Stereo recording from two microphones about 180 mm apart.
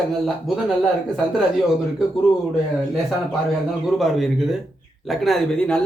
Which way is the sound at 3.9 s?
Centre (ahead or behind).